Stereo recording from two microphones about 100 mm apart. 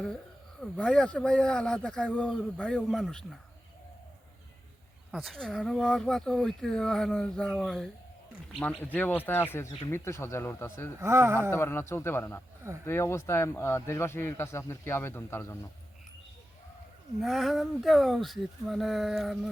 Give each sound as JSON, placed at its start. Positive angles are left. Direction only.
{"t": 0.6, "sound": "speech", "side_deg": 10}
{"t": 5.1, "sound": "speech", "side_deg": 0}
{"t": 8.5, "sound": "a man's voice", "side_deg": 15}
{"t": 11.0, "sound": "speech", "side_deg": -25}
{"t": 11.5, "sound": "a man's voice", "side_deg": 25}
{"t": 17.2, "sound": "speech", "side_deg": 0}